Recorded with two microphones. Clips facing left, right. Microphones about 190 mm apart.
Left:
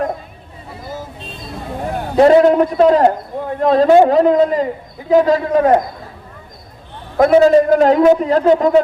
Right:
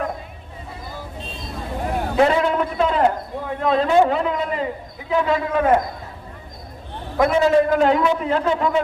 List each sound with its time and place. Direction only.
2.1 s a man's voice: 40° left (ahead or behind)
7.2 s a man's voice: 40° left (ahead or behind)